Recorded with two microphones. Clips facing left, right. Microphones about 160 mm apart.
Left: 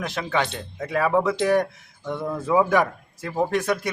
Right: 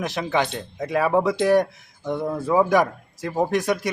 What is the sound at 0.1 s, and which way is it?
Speech, 15° right (ahead or behind).